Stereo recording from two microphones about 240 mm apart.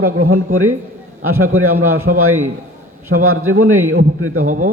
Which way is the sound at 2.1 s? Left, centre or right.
Right.